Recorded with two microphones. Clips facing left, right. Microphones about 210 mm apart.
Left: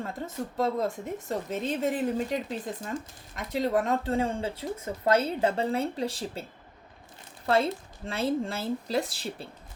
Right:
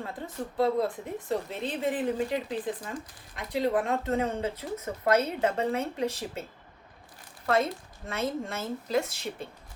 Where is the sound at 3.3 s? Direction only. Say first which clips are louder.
Even; 45° left (ahead or behind).